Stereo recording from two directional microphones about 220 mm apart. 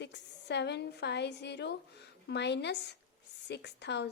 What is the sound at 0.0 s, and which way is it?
A woman's voice, 50° left (ahead or behind).